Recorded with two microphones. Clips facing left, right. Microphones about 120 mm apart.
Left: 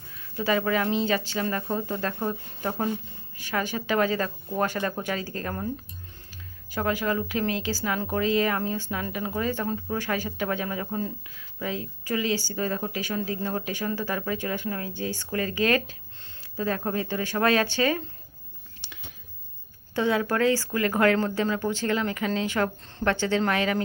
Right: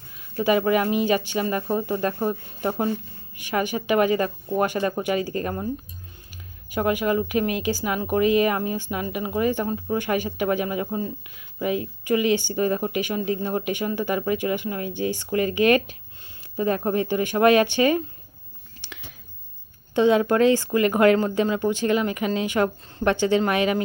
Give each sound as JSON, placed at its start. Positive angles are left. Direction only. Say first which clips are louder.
{"t": 0.2, "sound": "speech", "louder": "right 5 dB", "side_deg": -15}
{"t": 20.0, "sound": "speech", "louder": "right 6 dB", "side_deg": -20}